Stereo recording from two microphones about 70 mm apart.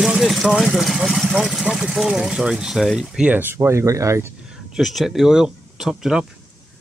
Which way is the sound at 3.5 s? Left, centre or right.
Right.